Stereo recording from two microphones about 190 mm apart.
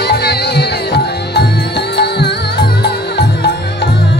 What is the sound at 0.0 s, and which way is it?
Music, 60° left (ahead or behind).